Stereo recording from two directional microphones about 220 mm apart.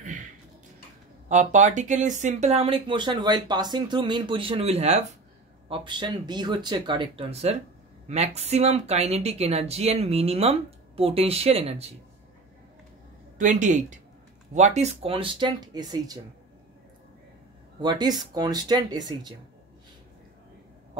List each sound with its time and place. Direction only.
1.3 s speech: 35° right (ahead or behind)
13.4 s speech: 35° right (ahead or behind); by 16.2 s 15° right (ahead or behind)
17.7 s speech: 20° right (ahead or behind)